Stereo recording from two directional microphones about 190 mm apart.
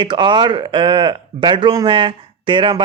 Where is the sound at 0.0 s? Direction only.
25° right (ahead or behind).